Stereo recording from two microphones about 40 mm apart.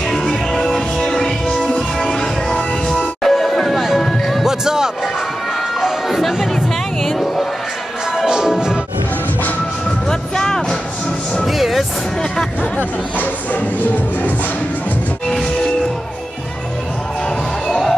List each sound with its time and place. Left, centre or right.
0.1 s music: centre
3.2 s music: centre
4.5 s music: centre
5.8 s a sound: centre
6.5 s music: centre
8.2 s music: centre
10.0 s music: centre
11.4 s music: centre
12.7 s music: left
15.2 s music: centre
17.6 s music: centre